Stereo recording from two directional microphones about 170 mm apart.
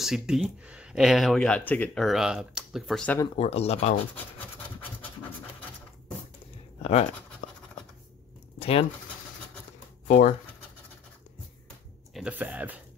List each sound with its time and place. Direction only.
0.0 s speech: centre (ahead or behind)
3.3 s speech: 35° left (ahead or behind)
6.8 s speech: 40° left (ahead or behind)
7.4 s scratch: 45° left (ahead or behind)
8.5 s speech: 35° left (ahead or behind)
12.1 s speech: 5° right (ahead or behind)